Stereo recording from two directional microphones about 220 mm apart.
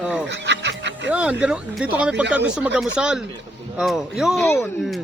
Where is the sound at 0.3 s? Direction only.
55° right (ahead or behind).